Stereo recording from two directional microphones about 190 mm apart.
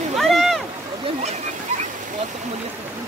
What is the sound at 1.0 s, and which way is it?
Splash, 35° right (ahead or behind).